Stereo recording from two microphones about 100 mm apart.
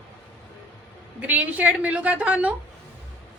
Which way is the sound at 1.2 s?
15° right (ahead or behind).